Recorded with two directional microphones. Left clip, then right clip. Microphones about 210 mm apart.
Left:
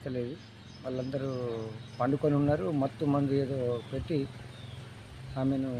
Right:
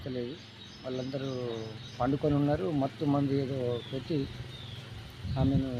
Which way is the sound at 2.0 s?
10° left (ahead or behind).